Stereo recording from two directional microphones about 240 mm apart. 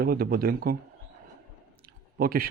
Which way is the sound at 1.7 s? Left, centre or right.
Right.